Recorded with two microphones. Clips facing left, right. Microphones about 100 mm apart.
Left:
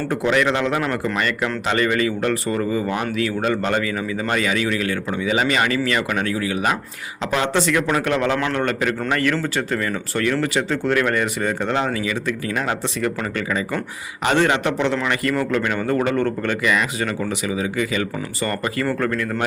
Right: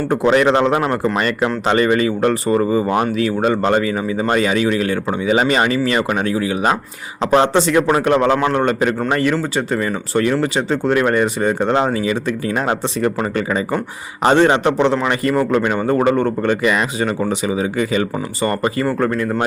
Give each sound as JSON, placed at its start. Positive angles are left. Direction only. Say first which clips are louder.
{"t": 0.1, "sound": "a man's voice", "louder": "right 6 dB", "side_deg": -30}
{"t": 8.1, "sound": "a man's voice", "louder": "right 7 dB", "side_deg": -45}
{"t": 8.4, "sound": "a man's voice", "louder": "right 5 dB", "side_deg": -25}